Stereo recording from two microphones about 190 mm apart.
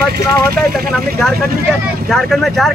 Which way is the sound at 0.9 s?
Centre (ahead or behind).